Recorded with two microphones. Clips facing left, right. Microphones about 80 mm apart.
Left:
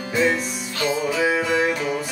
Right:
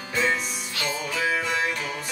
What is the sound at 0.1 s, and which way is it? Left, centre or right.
Music, centre.